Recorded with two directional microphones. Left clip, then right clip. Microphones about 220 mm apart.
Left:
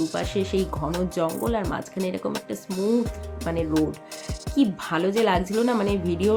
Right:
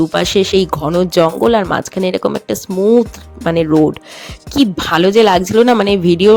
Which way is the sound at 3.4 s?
45° right (ahead or behind).